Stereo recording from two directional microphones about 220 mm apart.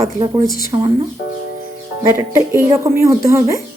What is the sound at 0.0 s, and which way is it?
Speech, 15° right (ahead or behind).